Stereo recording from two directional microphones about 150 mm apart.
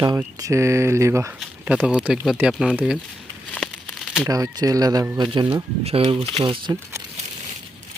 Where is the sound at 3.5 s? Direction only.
5° left (ahead or behind).